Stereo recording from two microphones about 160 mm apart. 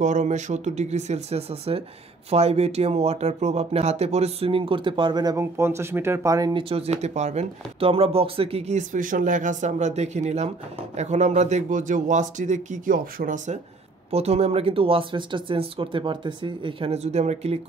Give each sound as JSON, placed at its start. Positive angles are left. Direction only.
{"t": 0.0, "sound": "speech", "side_deg": -50}
{"t": 6.7, "sound": "speech", "side_deg": -40}
{"t": 14.1, "sound": "speech", "side_deg": -40}